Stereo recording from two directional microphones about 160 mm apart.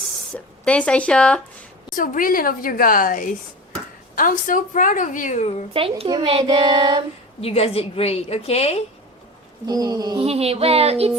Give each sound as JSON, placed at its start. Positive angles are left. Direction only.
{"t": 0.6, "sound": "speech", "side_deg": 5}
{"t": 2.0, "sound": "a woman's voice", "side_deg": 60}
{"t": 6.1, "sound": "child singing", "side_deg": -30}
{"t": 7.4, "sound": "a woman's voice", "side_deg": 40}
{"t": 9.6, "sound": "child singing", "side_deg": -25}
{"t": 10.2, "sound": "speech", "side_deg": -40}